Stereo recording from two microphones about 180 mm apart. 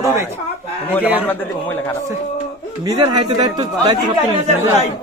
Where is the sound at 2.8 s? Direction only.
20° right (ahead or behind).